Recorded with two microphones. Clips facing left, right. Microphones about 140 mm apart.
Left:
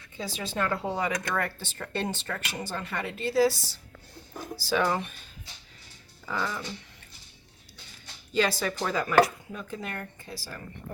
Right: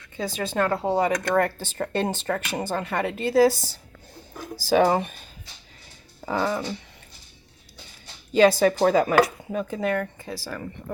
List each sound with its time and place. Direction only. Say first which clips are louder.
0.2 s speech: right 6 dB; 50° right (ahead or behind)
0.7 s speech: right 7 dB; 30° right (ahead or behind)
4.9 s speech: right 6 dB; 55° right (ahead or behind)
6.2 s speech: right 7 dB; 45° right (ahead or behind)
8.4 s speech: right 10 dB; 50° right (ahead or behind); by 10.6 s 85° right